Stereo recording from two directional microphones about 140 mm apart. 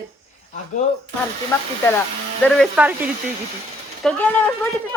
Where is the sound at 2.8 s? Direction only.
10° right (ahead or behind).